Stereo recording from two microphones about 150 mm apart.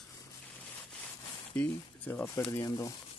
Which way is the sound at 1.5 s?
10° left (ahead or behind).